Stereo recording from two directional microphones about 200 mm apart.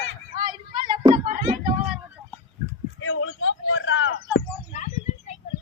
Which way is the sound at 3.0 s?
90° left.